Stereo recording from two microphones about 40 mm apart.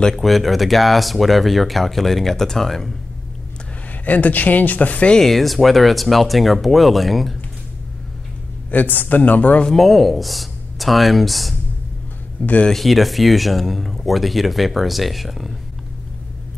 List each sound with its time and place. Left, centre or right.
0.1 s speech: centre
4.0 s speech: left
5.2 s speech: centre
8.6 s speech: left
9.7 s speech: centre
12.4 s speech: left
12.7 s speech: centre